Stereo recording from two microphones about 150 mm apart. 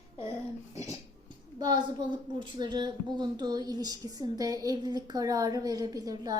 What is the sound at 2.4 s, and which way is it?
A woman's voice, 30° right (ahead or behind).